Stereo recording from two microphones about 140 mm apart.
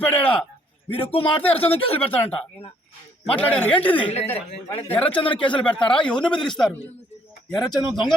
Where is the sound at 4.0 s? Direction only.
40° left (ahead or behind).